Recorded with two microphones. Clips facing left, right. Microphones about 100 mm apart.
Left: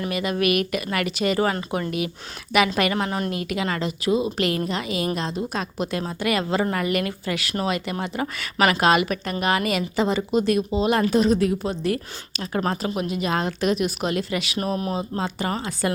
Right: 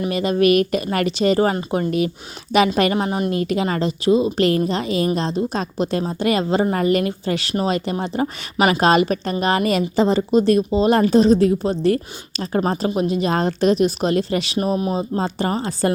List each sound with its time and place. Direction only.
0.1 s a woman's voice: 35° right (ahead or behind)
3.3 s a woman's voice: 35° right (ahead or behind)
8.5 s a woman's voice: 20° right (ahead or behind)
8.8 s speech: 35° right (ahead or behind)
14.6 s a woman's voice: 20° right (ahead or behind)
14.9 s speech: 35° right (ahead or behind)